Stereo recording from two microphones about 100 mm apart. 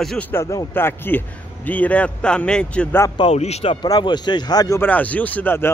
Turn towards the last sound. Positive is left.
turn(degrees=20)  # may be behind; listen again after turning